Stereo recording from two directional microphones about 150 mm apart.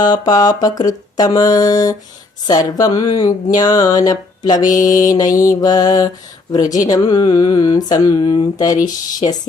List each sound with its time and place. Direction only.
0.0 s speech: 25° left (ahead or behind)